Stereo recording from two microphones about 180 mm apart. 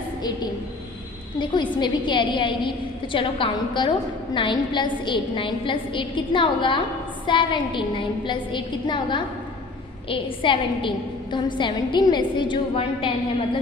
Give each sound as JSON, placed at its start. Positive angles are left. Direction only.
{"t": 1.4, "sound": "a woman's voice", "side_deg": 25}